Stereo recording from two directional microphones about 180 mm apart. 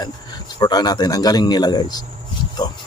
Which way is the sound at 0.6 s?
20° left (ahead or behind).